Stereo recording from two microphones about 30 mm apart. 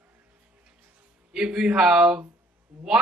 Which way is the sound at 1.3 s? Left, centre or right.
Right.